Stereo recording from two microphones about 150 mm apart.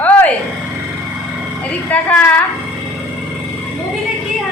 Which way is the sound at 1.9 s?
10° left (ahead or behind).